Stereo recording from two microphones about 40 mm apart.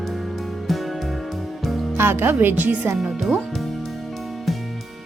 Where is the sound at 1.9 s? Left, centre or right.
Right.